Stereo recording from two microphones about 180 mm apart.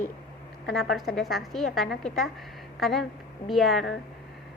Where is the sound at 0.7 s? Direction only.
Centre (ahead or behind).